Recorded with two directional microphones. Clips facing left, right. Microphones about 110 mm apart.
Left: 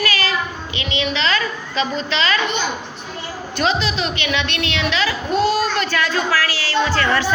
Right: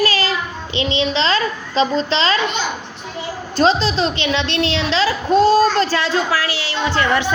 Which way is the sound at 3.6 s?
35° right (ahead or behind).